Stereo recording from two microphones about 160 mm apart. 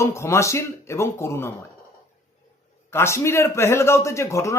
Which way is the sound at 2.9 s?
15° left (ahead or behind).